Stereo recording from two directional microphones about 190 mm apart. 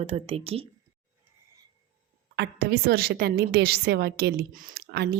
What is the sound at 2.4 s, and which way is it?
A woman's voice, 55° right (ahead or behind).